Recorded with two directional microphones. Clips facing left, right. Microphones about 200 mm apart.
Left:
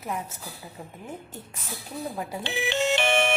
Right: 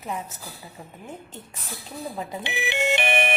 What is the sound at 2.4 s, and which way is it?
Music, 15° right (ahead or behind).